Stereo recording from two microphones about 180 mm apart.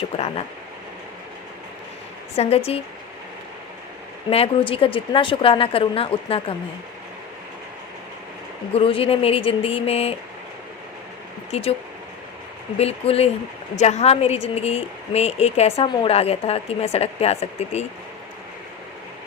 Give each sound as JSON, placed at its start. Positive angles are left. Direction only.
{"t": 0.1, "sound": "a woman's voice", "side_deg": 30}
{"t": 2.3, "sound": "a woman's voice", "side_deg": 35}
{"t": 4.3, "sound": "a woman's voice", "side_deg": 30}
{"t": 8.7, "sound": "a woman's voice", "side_deg": 30}
{"t": 12.7, "sound": "a woman's voice", "side_deg": 35}